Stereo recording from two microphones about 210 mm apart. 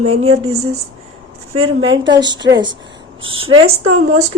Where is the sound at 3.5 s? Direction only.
90° right.